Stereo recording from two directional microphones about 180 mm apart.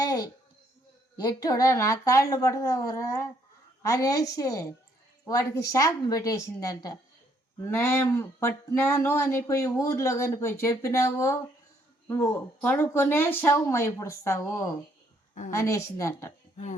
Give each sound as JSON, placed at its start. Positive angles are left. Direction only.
{"t": 0.0, "sound": "a sound", "side_deg": 20}
{"t": 1.1, "sound": "a woman's voice", "side_deg": 20}
{"t": 15.4, "sound": "speech", "side_deg": 15}